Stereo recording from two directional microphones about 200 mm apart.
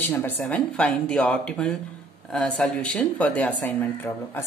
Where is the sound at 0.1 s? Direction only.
10° left (ahead or behind).